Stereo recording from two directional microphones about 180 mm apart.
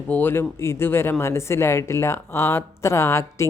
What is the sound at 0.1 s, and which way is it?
Speech, 10° left (ahead or behind).